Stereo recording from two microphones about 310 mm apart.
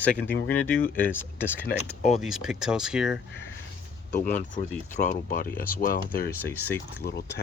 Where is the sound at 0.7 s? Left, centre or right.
Centre.